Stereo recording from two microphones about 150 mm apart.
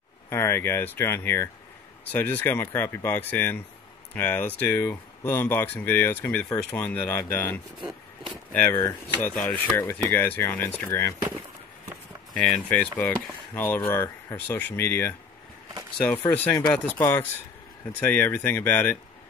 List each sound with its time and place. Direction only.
0.3 s speech: 15° left (ahead or behind)
8.7 s speech: 20° left (ahead or behind)
9.3 s speech: 5° left (ahead or behind)
9.8 s speech: 15° left (ahead or behind)
12.4 s speech: 5° left (ahead or behind)
16.7 s speech: 10° left (ahead or behind)